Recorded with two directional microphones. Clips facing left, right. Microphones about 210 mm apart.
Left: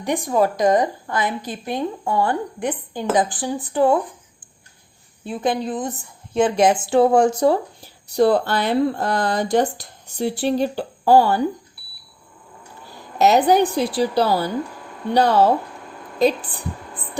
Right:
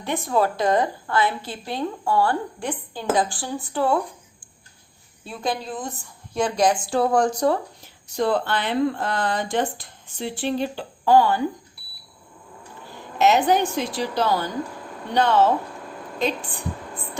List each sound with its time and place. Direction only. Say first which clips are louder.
0.0 s a woman's voice: left 3 dB; 15° left (ahead or behind)
5.3 s speech: left 5 dB; 20° left (ahead or behind); by 11.4 s 40° left (ahead or behind)
13.1 s speech: left 3 dB; 35° left (ahead or behind)